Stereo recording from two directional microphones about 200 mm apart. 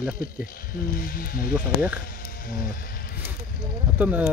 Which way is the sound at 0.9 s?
45° left (ahead or behind).